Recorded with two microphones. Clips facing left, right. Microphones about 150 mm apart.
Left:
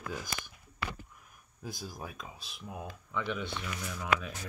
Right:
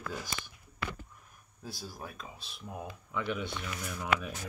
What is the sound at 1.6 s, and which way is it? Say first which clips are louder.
Speech: left 1 dB; 15° left (ahead or behind).